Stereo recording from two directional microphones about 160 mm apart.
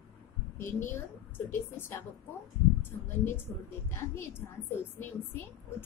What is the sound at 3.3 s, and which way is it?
A woman's voice, 15° left (ahead or behind).